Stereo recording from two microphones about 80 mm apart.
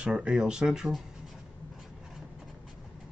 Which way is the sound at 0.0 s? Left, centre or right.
Centre.